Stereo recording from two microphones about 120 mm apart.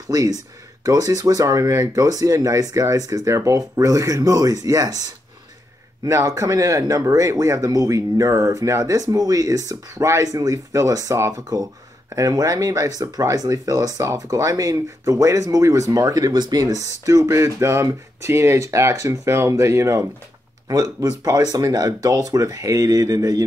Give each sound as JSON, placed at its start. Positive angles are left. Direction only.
{"t": 0.1, "sound": "speech", "side_deg": -30}